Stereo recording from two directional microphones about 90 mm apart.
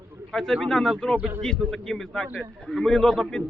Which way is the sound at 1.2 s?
20° right (ahead or behind).